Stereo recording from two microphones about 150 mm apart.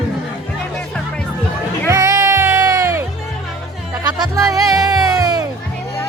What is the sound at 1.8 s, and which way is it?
Music, 20° right (ahead or behind).